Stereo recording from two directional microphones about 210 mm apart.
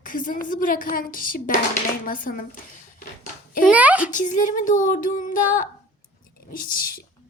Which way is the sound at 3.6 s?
5° right (ahead or behind).